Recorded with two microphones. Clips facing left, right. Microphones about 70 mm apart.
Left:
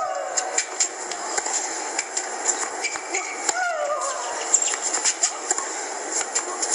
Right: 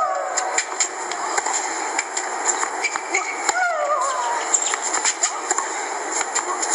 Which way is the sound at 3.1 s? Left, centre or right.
Right.